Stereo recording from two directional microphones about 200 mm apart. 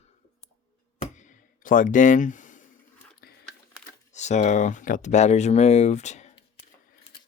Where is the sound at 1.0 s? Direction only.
40° left (ahead or behind).